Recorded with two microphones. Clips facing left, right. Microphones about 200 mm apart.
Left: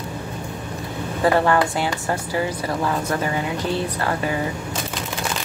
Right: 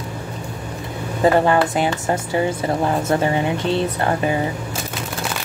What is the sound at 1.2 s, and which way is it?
A woman's voice, 20° right (ahead or behind).